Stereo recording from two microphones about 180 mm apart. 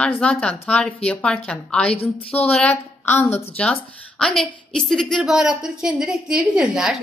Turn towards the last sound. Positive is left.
turn(degrees=-5)  # may be behind; listen again after turning